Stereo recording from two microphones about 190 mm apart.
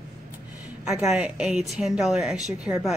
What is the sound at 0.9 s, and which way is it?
Speech, centre (ahead or behind).